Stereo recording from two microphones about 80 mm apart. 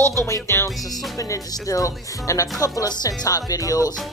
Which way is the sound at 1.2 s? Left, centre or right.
Left.